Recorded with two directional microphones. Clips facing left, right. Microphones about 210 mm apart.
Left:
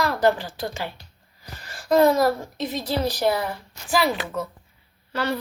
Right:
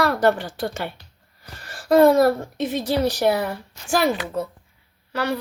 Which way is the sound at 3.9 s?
45° right (ahead or behind).